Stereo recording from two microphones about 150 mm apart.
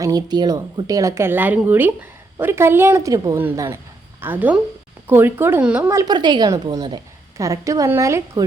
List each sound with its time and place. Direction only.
0.0 s a woman's voice: 25° right (ahead or behind); by 5.9 s 10° right (ahead or behind)
5.9 s a woman's voice: 25° right (ahead or behind)